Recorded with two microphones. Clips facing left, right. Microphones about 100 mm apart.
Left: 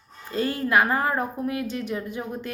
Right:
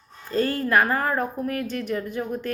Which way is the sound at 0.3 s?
15° left (ahead or behind).